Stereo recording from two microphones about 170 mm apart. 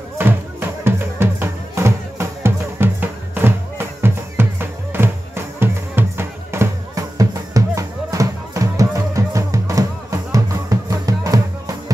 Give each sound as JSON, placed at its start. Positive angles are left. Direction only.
{"t": 0.2, "sound": "music", "side_deg": -15}